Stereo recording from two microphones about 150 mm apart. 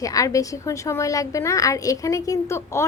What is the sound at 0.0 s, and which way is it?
A woman's voice, 25° left (ahead or behind).